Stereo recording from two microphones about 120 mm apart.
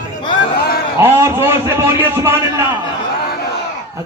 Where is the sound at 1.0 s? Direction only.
20° right (ahead or behind).